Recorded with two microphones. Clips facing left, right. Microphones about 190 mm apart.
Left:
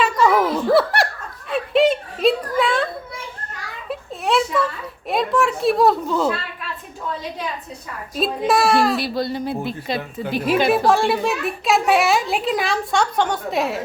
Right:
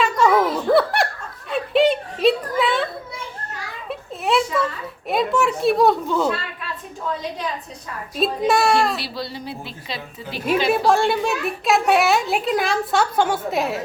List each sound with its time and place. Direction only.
0.0 s giggle: centre (ahead or behind)
1.5 s a sound: centre (ahead or behind)
8.1 s a woman's voice: centre (ahead or behind)
9.0 s a woman's voice: 50° left (ahead or behind)
10.7 s a woman's voice: centre (ahead or behind)